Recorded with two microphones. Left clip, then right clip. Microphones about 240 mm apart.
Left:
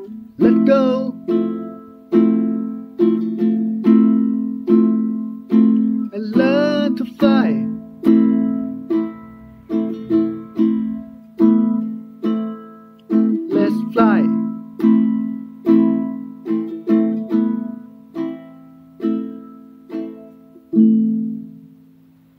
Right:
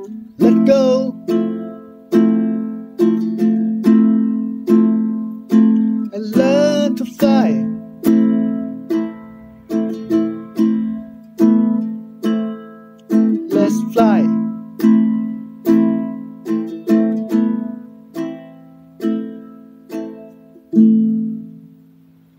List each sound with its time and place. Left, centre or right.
0.7 s music: centre
1.2 s music: right
6.0 s music: centre
7.7 s music: right
13.6 s music: centre
14.3 s music: right